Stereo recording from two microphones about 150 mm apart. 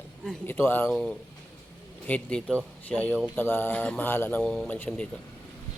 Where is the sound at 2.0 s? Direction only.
10° left (ahead or behind).